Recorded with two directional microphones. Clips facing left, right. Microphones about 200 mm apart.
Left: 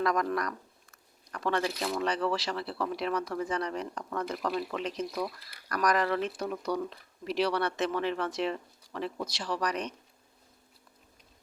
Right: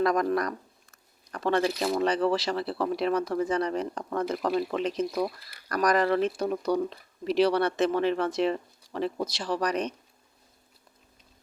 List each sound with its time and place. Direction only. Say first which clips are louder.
0.0 s speech: right 4 dB; 30° right (ahead or behind)